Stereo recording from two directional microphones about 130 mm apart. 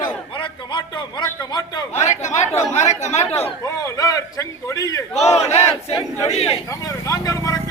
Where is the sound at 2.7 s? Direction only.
65° left (ahead or behind).